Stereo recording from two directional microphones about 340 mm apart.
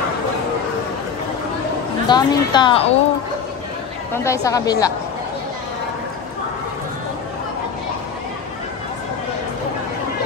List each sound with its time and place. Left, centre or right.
2.0 s a woman's voice: centre
4.1 s a woman's voice: centre